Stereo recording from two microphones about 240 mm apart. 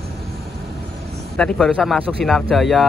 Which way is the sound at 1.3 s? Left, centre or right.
Centre.